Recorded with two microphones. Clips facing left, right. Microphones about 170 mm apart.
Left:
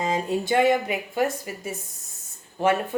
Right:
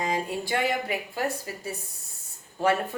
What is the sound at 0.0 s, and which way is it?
A woman's voice, 20° left (ahead or behind).